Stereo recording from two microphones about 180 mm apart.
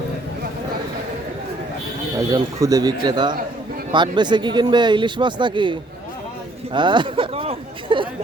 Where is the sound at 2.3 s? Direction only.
20° right (ahead or behind).